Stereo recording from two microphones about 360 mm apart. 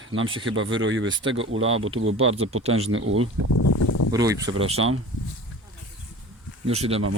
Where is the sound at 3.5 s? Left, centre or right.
Left.